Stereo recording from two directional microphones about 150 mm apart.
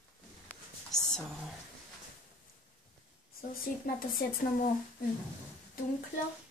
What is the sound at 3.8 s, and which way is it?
Speech, 70° left (ahead or behind).